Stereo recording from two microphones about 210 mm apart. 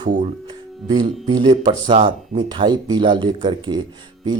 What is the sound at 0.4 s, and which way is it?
Speech, 20° right (ahead or behind).